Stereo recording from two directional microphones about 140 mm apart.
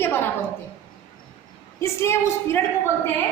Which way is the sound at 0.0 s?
15° left (ahead or behind).